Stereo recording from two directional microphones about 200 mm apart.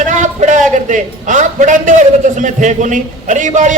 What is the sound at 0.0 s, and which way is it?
A man's voice, 40° right (ahead or behind).